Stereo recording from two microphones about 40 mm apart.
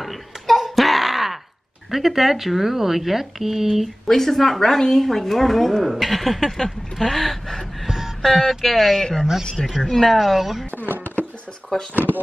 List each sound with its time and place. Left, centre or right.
0.0 s a sound: centre
1.9 s speech: centre
3.7 s speech: centre
9.0 s speech: centre
10.1 s speech: centre
11.9 s speech: right